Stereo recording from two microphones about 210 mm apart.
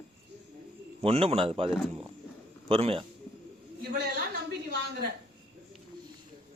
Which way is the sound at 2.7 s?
25° right (ahead or behind).